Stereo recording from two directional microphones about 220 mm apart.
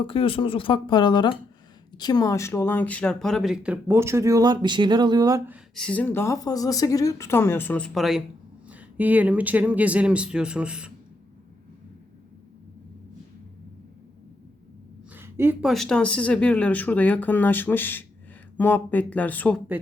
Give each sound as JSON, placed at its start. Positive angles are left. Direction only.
{"t": 0.0, "sound": "speech", "side_deg": 25}
{"t": 5.7, "sound": "speech", "side_deg": 5}
{"t": 15.1, "sound": "speech", "side_deg": -10}